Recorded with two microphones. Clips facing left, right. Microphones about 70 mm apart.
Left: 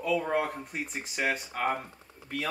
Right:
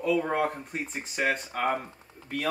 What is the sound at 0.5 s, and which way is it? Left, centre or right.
Speech, centre.